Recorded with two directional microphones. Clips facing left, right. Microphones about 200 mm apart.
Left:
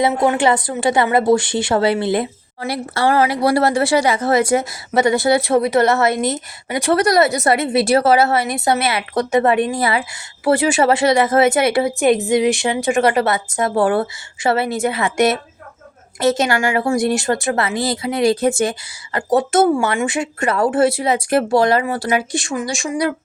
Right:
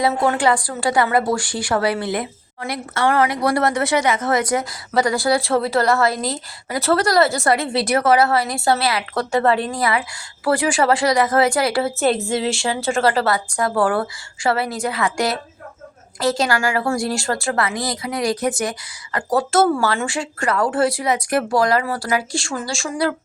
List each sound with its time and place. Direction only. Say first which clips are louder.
0.0 s speech: left 2 dB; 20° left (ahead or behind)